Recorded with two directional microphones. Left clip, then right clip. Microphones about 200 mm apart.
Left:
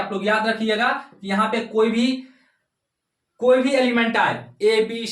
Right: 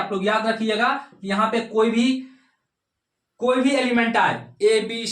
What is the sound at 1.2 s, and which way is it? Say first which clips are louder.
Speech: even; 5° right (ahead or behind).